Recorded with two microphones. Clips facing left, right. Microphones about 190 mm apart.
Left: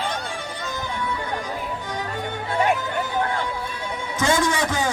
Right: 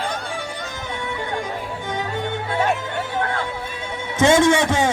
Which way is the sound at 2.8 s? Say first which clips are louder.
Even; 25° right (ahead or behind).